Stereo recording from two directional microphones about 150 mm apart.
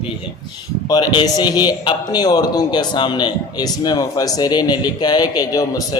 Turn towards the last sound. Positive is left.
turn(degrees=25)  # may be behind; listen again after turning